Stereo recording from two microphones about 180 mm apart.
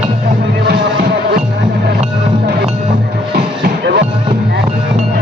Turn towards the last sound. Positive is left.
turn(degrees=-65)  # may be behind; listen again after turning